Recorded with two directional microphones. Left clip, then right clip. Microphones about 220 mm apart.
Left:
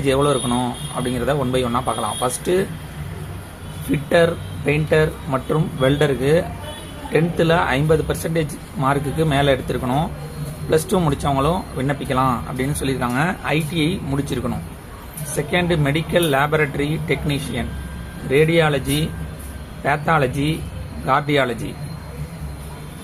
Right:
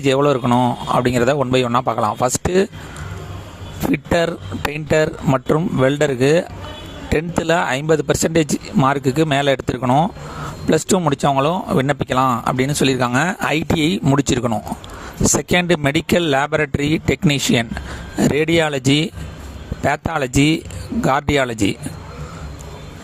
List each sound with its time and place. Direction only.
0.0 s speech: 45° right (ahead or behind)
3.9 s speech: 50° right (ahead or behind)